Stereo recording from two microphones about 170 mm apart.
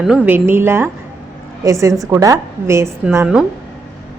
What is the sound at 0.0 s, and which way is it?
A woman's voice, 5° right (ahead or behind).